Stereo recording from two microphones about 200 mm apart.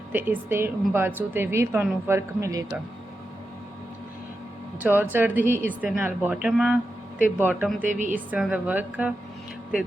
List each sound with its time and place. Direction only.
0.1 s a woman's voice: 10° right (ahead or behind)
4.8 s a woman's voice: 10° right (ahead or behind)
7.9 s a woman's voice: 40° right (ahead or behind)
8.1 s a woman's voice: 5° right (ahead or behind)